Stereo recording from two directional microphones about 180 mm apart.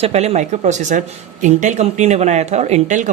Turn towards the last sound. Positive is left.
turn(degrees=-40)  # may be behind; listen again after turning